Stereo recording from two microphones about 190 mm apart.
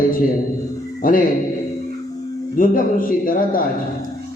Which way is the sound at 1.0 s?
45° left (ahead or behind).